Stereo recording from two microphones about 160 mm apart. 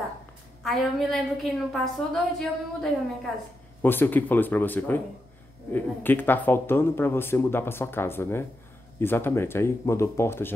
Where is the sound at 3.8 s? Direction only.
10° left (ahead or behind).